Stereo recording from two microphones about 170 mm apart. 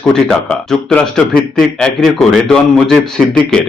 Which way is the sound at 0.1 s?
5° left (ahead or behind).